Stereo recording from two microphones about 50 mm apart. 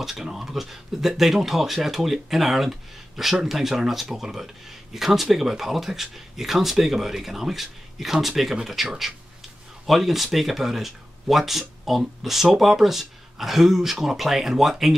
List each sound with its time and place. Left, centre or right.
0.0 s speech: centre
9.8 s speech: centre